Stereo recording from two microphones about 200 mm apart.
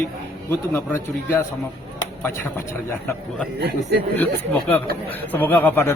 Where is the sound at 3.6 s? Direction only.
55° right (ahead or behind).